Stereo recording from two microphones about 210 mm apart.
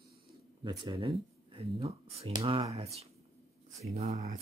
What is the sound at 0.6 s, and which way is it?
Speech, 20° right (ahead or behind).